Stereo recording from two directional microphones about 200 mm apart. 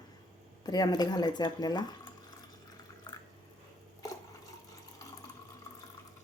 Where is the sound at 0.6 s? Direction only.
20° left (ahead or behind).